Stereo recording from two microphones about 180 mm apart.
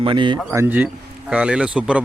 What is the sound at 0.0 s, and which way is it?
Speech, 25° right (ahead or behind).